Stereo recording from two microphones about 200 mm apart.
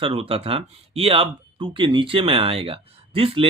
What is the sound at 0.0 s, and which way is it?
Speech, 30° right (ahead or behind).